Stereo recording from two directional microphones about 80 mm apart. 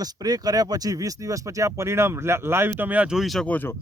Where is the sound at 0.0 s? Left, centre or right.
Right.